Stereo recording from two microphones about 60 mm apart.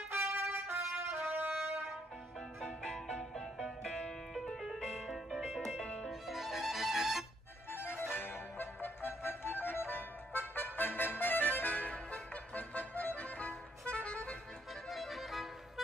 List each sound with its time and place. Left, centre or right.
0.1 s music: right
2.6 s music: centre
7.7 s music: left; by 14.3 s centre
14.9 s music: centre